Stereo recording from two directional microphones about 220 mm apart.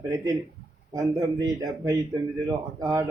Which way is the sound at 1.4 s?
15° right (ahead or behind).